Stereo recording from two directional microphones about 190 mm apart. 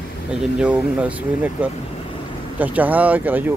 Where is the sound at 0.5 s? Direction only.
5° right (ahead or behind).